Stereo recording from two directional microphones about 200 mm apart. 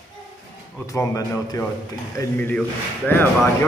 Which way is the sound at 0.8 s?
15° left (ahead or behind).